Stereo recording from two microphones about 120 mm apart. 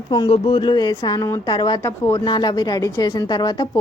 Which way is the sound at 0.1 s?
45° left (ahead or behind).